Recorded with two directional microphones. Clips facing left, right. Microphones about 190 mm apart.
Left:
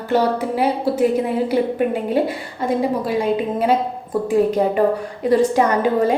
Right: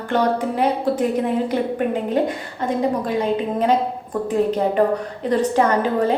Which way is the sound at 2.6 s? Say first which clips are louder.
Left 1 dB; 10° left (ahead or behind).